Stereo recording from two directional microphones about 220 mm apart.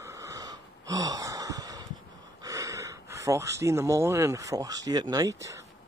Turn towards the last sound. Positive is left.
turn(degrees=-15)  # may be behind; listen again after turning